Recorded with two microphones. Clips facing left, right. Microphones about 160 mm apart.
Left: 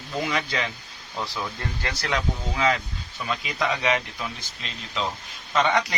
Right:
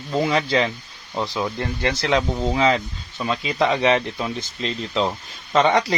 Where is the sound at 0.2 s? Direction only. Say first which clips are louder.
Right 7 dB; 30° right (ahead or behind).